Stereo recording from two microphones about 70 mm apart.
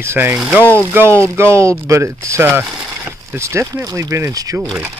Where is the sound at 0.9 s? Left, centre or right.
Right.